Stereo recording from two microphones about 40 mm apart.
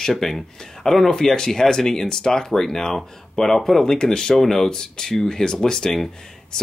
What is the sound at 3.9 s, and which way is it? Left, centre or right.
Speech, left.